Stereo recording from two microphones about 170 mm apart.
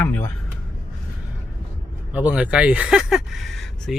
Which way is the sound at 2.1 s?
10° right (ahead or behind).